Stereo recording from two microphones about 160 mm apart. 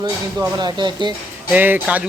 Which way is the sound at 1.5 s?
10° right (ahead or behind).